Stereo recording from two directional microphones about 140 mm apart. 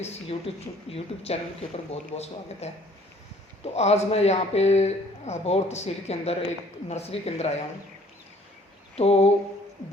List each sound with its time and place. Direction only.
0.0 s speech: 45° left (ahead or behind)
3.8 s speech: 50° left (ahead or behind)
9.0 s speech: 45° left (ahead or behind)